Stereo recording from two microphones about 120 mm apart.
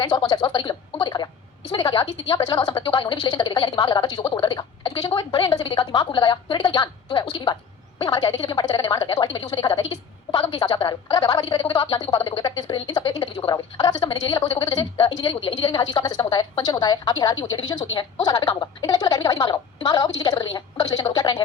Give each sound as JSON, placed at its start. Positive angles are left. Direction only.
{"t": 0.0, "sound": "a woman's voice", "side_deg": 40}
{"t": 13.2, "sound": "a woman's voice", "side_deg": 45}